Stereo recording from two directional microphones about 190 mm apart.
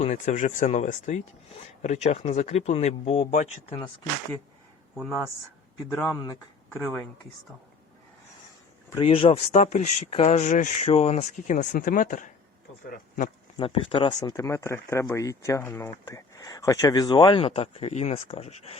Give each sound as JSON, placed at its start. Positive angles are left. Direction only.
{"t": 0.0, "sound": "speech", "side_deg": 35}
{"t": 5.9, "sound": "speech", "side_deg": 10}
{"t": 9.0, "sound": "speech", "side_deg": 30}
{"t": 13.6, "sound": "speech", "side_deg": 30}